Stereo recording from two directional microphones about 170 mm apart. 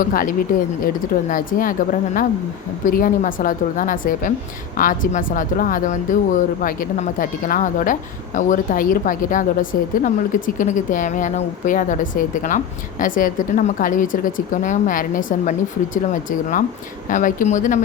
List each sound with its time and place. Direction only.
0.0 s a woman's voice: 55° left (ahead or behind)
17.1 s a woman's voice: 50° left (ahead or behind)